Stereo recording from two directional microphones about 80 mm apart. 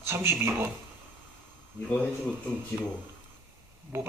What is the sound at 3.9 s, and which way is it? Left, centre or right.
Speech, right.